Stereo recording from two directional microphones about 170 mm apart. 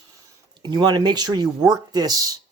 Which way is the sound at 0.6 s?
25° right (ahead or behind).